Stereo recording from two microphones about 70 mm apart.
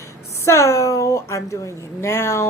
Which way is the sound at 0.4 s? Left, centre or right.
Left.